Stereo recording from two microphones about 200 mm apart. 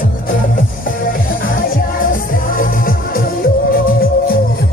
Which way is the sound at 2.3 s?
45° left (ahead or behind).